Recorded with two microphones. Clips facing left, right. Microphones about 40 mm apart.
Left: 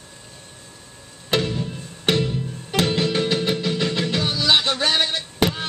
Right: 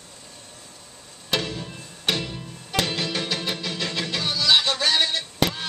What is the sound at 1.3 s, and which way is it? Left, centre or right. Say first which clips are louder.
Music: left 4 dB; centre.